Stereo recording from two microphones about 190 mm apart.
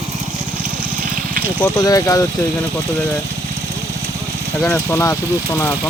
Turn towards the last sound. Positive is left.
turn(degrees=20)  # may be behind; listen again after turning